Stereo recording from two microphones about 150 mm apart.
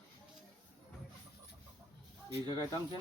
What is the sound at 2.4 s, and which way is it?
Speech, 25° right (ahead or behind).